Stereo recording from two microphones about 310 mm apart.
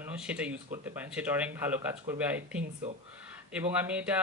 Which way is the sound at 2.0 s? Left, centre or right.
Centre.